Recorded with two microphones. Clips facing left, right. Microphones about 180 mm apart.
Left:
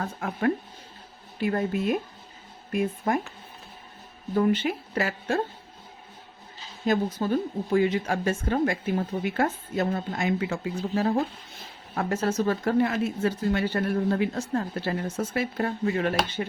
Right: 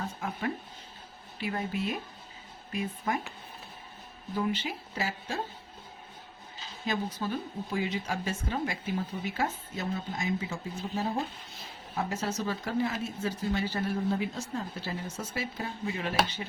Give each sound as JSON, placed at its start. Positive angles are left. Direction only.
{"t": 0.0, "sound": "speech", "side_deg": 60}
{"t": 3.1, "sound": "speech", "side_deg": 50}
{"t": 4.4, "sound": "speech", "side_deg": 55}
{"t": 6.8, "sound": "speech", "side_deg": 50}
{"t": 11.9, "sound": "speech", "side_deg": 55}